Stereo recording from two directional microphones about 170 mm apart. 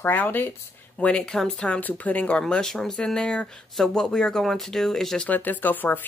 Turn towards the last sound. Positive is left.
turn(degrees=10)  # may be behind; listen again after turning